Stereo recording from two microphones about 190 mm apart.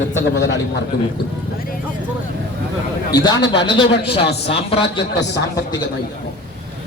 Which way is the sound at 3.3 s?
65° left (ahead or behind).